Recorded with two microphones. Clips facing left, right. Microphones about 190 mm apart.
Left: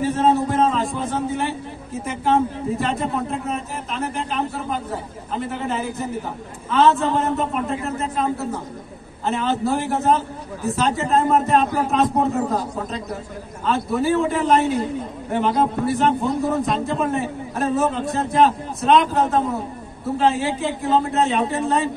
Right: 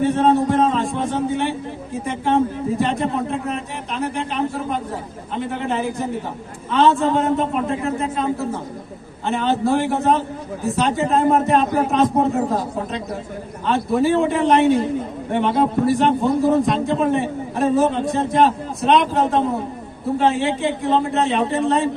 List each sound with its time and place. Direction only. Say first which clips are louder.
0.0 s a sound: right 2 dB; centre (ahead or behind)
2.0 s a man's voice: right 1 dB; centre (ahead or behind)
5.4 s a man's voice: right 3 dB; centre (ahead or behind)
9.2 s a man's voice: right 2 dB; centre (ahead or behind)
13.7 s a man's voice: right 2 dB; centre (ahead or behind)